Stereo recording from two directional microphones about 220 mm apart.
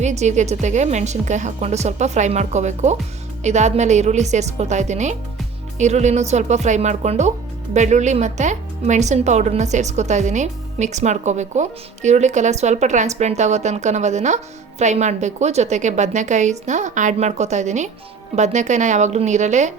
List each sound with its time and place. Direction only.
0.0 s speech: 30° right (ahead or behind)